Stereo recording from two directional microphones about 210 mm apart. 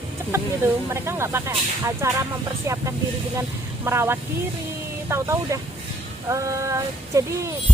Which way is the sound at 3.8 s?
10° right (ahead or behind).